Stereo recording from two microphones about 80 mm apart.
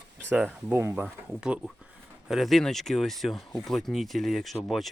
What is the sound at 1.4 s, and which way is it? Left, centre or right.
Speech, centre.